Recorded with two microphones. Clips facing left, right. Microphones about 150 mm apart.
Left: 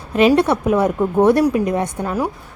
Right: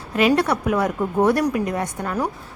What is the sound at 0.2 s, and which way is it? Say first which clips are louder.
A woman's voice: left 4 dB; 25° left (ahead or behind).